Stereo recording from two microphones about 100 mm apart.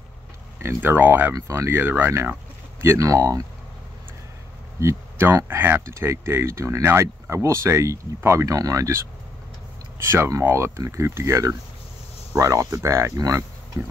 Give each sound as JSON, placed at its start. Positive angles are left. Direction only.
{"t": 0.6, "sound": "speech", "side_deg": -25}
{"t": 4.7, "sound": "speech", "side_deg": -30}